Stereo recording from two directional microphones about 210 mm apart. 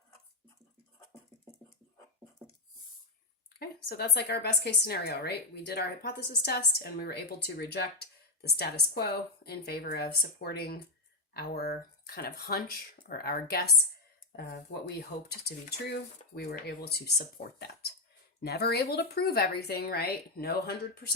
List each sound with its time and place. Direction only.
3.6 s a woman's voice: 50° left (ahead or behind)